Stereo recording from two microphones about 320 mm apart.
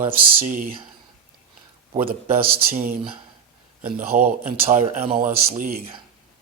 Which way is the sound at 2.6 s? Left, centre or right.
Right.